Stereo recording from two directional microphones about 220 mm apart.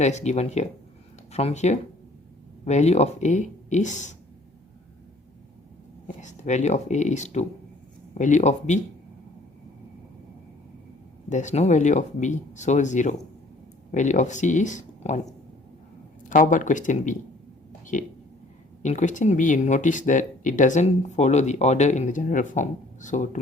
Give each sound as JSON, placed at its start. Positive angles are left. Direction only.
{"t": 0.0, "sound": "speech", "side_deg": 30}
{"t": 6.1, "sound": "speech", "side_deg": 35}
{"t": 11.3, "sound": "speech", "side_deg": 35}
{"t": 16.3, "sound": "speech", "side_deg": 35}